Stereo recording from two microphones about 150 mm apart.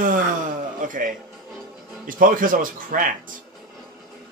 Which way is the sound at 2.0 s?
65° right (ahead or behind).